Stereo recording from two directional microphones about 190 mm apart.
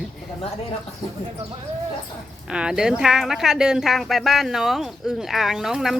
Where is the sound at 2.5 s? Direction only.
5° right (ahead or behind).